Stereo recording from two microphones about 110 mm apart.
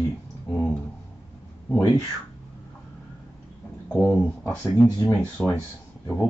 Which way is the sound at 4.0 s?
15° left (ahead or behind).